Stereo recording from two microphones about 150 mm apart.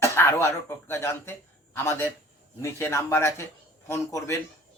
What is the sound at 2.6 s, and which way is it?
A man's voice, 20° left (ahead or behind).